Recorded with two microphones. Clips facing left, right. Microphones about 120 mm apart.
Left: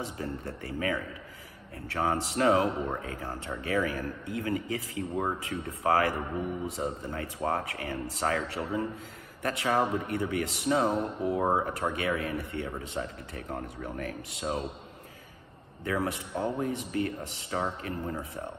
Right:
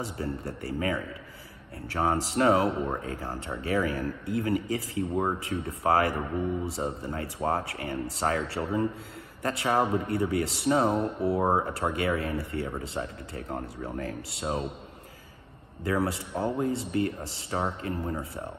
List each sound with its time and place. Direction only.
0.0 s speech: 30° right (ahead or behind)
15.8 s speech: 35° right (ahead or behind)